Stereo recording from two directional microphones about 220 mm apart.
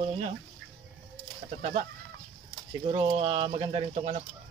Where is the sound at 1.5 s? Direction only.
35° right (ahead or behind).